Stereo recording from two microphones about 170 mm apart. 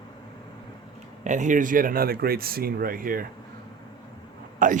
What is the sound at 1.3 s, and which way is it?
Speech, 45° right (ahead or behind).